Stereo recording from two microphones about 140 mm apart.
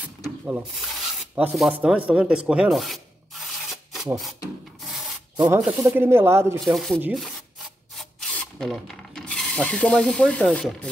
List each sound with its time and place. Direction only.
0.5 s speech: 5° right (ahead or behind)
1.3 s rub: 5° right (ahead or behind)
5.6 s speech: 10° right (ahead or behind)
6.6 s speech: centre (ahead or behind)
8.2 s speech: 5° left (ahead or behind)